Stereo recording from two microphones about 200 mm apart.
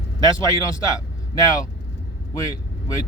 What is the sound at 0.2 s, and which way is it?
Speech, 15° left (ahead or behind).